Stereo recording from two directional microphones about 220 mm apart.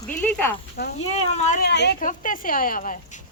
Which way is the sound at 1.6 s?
50° left (ahead or behind).